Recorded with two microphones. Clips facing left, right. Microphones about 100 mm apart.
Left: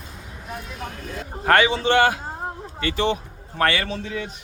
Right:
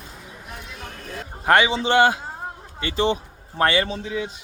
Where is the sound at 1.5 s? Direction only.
20° right (ahead or behind).